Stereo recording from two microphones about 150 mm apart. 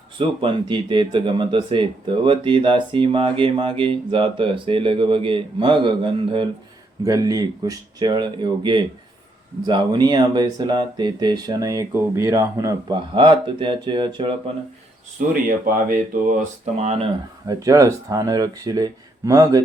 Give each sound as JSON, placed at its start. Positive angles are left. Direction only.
{"t": 0.2, "sound": "speech", "side_deg": -35}
{"t": 7.0, "sound": "speech", "side_deg": -25}
{"t": 13.1, "sound": "speech", "side_deg": -30}
{"t": 15.3, "sound": "speech", "side_deg": -70}
{"t": 16.7, "sound": "speech", "side_deg": -45}
{"t": 17.5, "sound": "speech", "side_deg": -20}